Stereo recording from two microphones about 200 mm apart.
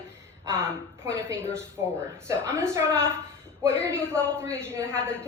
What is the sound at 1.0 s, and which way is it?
A woman's voice, 15° right (ahead or behind).